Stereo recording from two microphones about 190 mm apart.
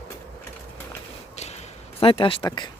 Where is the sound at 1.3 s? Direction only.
35° left (ahead or behind).